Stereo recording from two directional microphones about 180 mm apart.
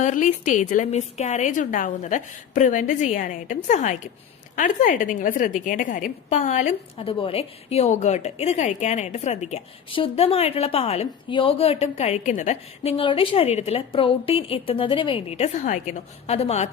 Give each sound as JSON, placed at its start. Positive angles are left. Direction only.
{"t": 0.0, "sound": "a woman's voice", "side_deg": 45}
{"t": 7.1, "sound": "a woman's voice", "side_deg": 30}